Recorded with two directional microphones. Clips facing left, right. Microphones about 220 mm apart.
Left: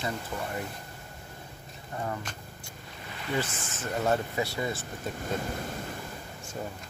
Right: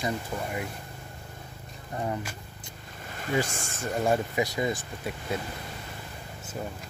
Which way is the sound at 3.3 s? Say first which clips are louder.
Right 3 dB; 15° right (ahead or behind).